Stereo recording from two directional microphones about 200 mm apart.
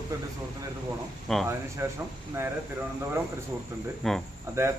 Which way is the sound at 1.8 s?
15° right (ahead or behind).